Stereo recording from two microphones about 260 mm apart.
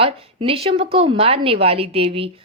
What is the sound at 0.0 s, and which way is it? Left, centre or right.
A woman's voice, right.